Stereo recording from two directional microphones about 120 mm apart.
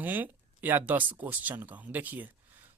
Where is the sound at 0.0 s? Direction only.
15° right (ahead or behind).